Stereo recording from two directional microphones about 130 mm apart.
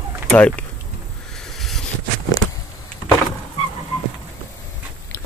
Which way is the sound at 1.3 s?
5° left (ahead or behind).